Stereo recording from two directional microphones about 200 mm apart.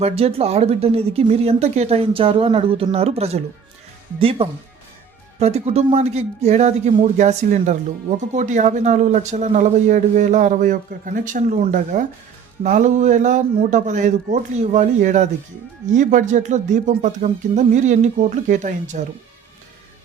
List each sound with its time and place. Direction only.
0.0 s speech: 30° right (ahead or behind)